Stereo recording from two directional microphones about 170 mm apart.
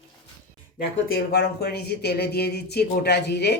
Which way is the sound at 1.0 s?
70° left (ahead or behind).